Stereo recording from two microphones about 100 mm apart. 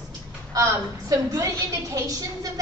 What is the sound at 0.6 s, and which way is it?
A woman's voice, 30° right (ahead or behind).